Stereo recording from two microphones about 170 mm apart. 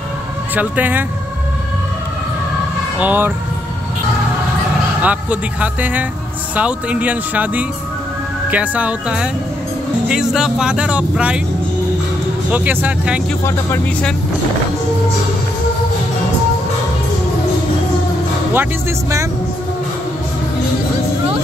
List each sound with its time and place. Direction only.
0.6 s speech: 10° right (ahead or behind)
3.0 s speech: 10° right (ahead or behind)
5.0 s speech: 10° right (ahead or behind)
12.4 s speech: 10° right (ahead or behind)
13.4 s speech: 15° left (ahead or behind)
18.5 s speech: 15° right (ahead or behind)